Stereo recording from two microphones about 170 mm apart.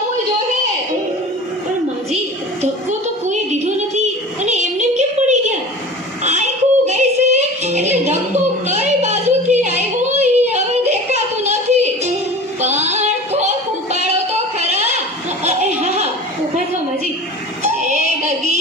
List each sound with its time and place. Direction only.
3.2 s music: 45° right (ahead or behind)
6.2 s yodeling: 40° right (ahead or behind)
12.6 s female singing: 40° right (ahead or behind)
14.1 s a sound: 40° right (ahead or behind)
17.6 s female singing: 45° right (ahead or behind)
18.2 s music: 45° right (ahead or behind)